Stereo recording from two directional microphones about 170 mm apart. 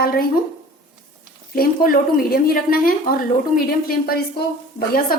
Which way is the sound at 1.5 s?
60° left (ahead or behind).